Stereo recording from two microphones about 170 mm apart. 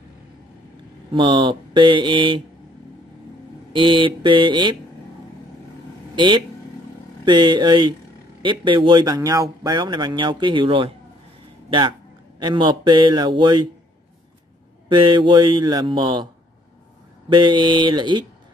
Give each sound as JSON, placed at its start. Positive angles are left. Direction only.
{"t": 1.1, "sound": "speech", "side_deg": -30}
{"t": 3.7, "sound": "speech", "side_deg": -30}
{"t": 6.1, "sound": "speech", "side_deg": -25}
{"t": 12.4, "sound": "speech", "side_deg": -25}
{"t": 14.9, "sound": "speech", "side_deg": -30}
{"t": 17.3, "sound": "speech", "side_deg": -25}